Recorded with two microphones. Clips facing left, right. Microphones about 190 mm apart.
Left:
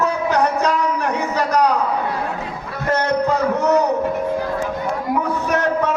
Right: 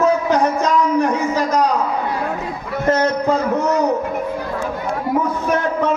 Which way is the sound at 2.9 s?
65° left (ahead or behind).